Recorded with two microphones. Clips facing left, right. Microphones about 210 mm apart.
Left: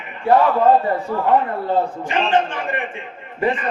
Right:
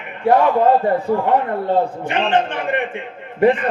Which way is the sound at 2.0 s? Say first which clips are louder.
Right 1 dB; 60° right (ahead or behind).